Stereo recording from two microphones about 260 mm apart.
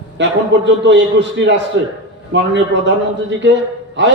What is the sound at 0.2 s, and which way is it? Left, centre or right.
A man's voice, right.